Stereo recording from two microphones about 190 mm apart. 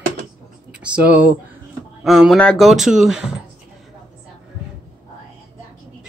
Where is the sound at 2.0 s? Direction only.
Centre (ahead or behind).